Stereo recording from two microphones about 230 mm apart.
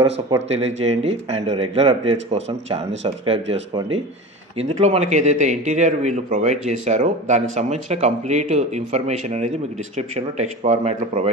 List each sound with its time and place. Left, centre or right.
0.5 s a man's voice: right